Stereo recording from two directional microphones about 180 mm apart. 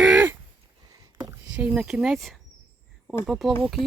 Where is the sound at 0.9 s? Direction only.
20° right (ahead or behind).